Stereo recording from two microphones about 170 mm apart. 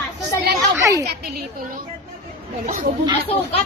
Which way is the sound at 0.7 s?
20° right (ahead or behind).